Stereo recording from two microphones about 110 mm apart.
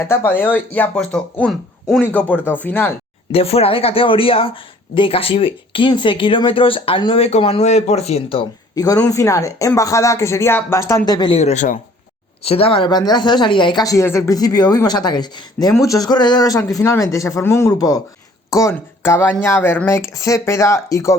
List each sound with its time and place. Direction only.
0.0 s speech: 25° left (ahead or behind)
3.3 s speech: 65° left (ahead or behind)
8.7 s speech: 35° left (ahead or behind)
11.3 s speech: 80° left
12.4 s speech: 65° left (ahead or behind)
12.9 s speech: 40° left (ahead or behind)
13.8 s speech: 25° left (ahead or behind)
15.7 s speech: 30° left (ahead or behind)